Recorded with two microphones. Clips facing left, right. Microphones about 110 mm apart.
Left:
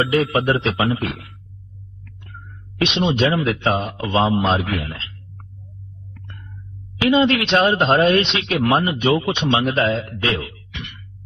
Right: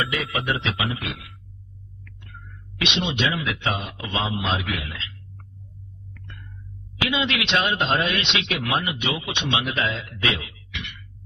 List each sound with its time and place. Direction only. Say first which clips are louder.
0.2 s a man's voice: left 8 dB; 35° left (ahead or behind)
2.7 s a man's voice: left 7 dB; 40° left (ahead or behind)
7.1 s a man's voice: left 9 dB; 40° left (ahead or behind)